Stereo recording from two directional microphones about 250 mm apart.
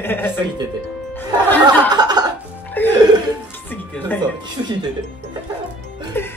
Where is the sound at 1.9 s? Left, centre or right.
Centre.